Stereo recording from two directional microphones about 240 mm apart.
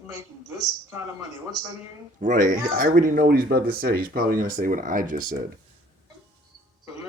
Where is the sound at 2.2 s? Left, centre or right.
Right.